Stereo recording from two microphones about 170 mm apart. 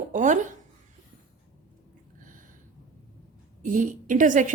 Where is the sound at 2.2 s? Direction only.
50° right (ahead or behind).